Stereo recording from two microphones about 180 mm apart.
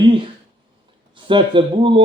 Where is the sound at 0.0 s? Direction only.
30° right (ahead or behind).